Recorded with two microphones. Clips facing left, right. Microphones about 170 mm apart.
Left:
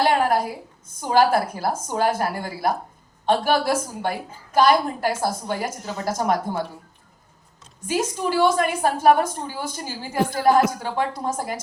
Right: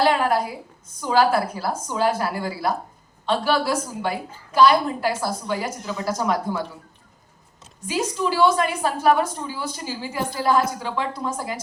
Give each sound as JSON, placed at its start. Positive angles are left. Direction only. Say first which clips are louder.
{"t": 1.1, "sound": "a woman's voice", "louder": "left 1 dB", "side_deg": 50}
{"t": 7.9, "sound": "a woman's voice", "louder": "even", "side_deg": 50}